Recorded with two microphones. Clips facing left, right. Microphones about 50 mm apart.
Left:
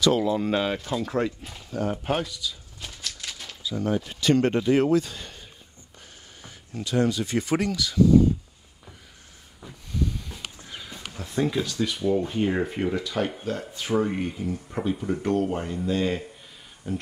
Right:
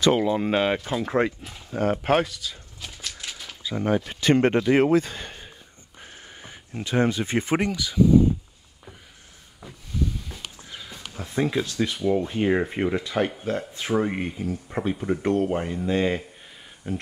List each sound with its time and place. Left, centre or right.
0.0 s speech: right
1.9 s speech: right
3.0 s a sound: centre
3.6 s speech: right; by 8.1 s centre
9.6 s a sound: centre
11.1 s speech: centre